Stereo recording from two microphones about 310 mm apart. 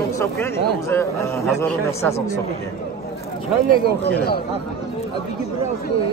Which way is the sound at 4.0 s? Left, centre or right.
Left.